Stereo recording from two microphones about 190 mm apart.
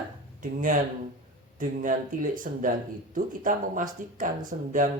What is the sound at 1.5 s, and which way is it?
Speech, 45° right (ahead or behind).